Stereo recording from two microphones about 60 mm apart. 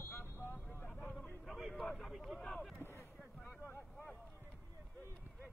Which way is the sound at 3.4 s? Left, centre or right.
Left.